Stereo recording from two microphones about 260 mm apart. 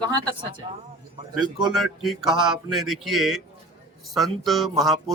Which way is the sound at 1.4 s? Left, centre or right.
Centre.